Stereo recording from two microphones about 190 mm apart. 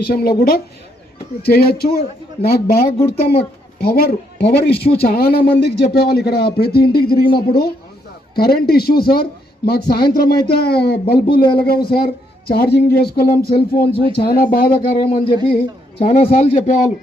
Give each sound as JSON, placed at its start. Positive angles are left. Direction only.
{"t": 0.1, "sound": "a man's voice", "side_deg": 55}
{"t": 16.0, "sound": "a man's voice", "side_deg": 35}